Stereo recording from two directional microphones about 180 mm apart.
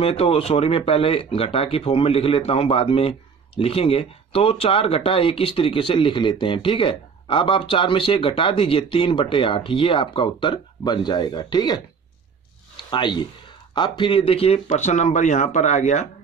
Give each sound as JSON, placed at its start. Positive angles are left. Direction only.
{"t": 0.0, "sound": "speech", "side_deg": 35}
{"t": 12.7, "sound": "a sound", "side_deg": 25}
{"t": 13.7, "sound": "speech", "side_deg": 25}